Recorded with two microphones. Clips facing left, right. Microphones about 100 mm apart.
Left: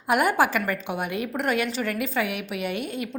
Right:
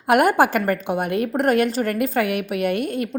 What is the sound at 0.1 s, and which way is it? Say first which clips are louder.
A woman's voice: right 5 dB; 55° right (ahead or behind).